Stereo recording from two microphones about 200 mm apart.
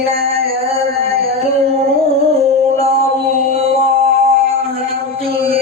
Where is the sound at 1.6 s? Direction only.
30° right (ahead or behind).